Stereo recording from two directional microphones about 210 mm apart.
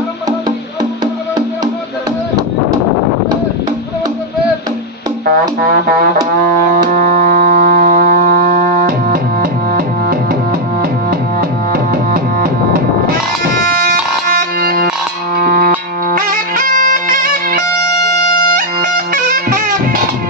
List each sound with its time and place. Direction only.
6.7 s music: 40° right (ahead or behind)
11.7 s music: 45° right (ahead or behind)